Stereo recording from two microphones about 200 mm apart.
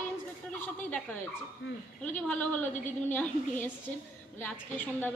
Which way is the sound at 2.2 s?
10° left (ahead or behind).